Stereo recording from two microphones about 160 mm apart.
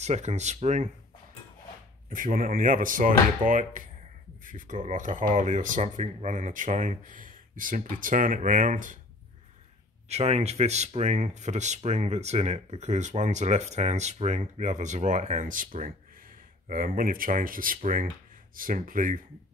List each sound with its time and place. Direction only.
0.0 s speech: 45° right (ahead or behind)
2.0 s speech: 60° right (ahead or behind)
10.0 s speech: 40° right (ahead or behind); by 19.2 s 60° right (ahead or behind)